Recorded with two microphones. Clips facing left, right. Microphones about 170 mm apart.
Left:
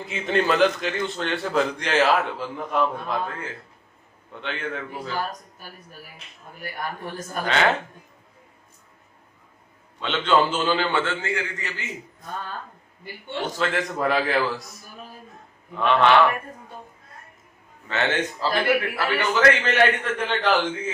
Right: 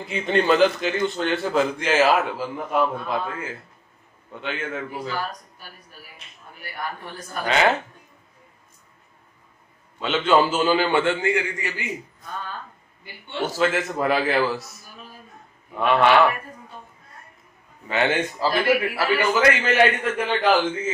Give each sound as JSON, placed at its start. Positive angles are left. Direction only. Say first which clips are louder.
{"t": 0.0, "sound": "a man's voice", "louder": "right 2 dB", "side_deg": 0}
{"t": 6.6, "sound": "speech", "louder": "left 1 dB", "side_deg": 45}
{"t": 7.4, "sound": "a man's voice", "louder": "right 2 dB", "side_deg": -5}
{"t": 9.9, "sound": "a man's voice", "louder": "right 2 dB", "side_deg": -5}
{"t": 13.5, "sound": "a man's voice", "louder": "right 3 dB", "side_deg": -5}
{"t": 15.7, "sound": "a man's voice", "louder": "even", "side_deg": -10}
{"t": 17.8, "sound": "a man's voice", "louder": "right 2 dB", "side_deg": -10}